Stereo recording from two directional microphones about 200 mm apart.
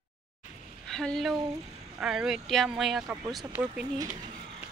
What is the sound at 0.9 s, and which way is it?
A woman's voice, centre (ahead or behind).